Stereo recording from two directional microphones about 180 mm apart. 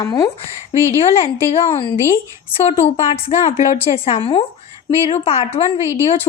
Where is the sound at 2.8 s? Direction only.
35° left (ahead or behind).